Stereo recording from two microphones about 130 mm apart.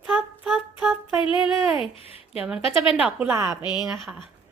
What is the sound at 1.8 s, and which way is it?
Speech, 50° left (ahead or behind).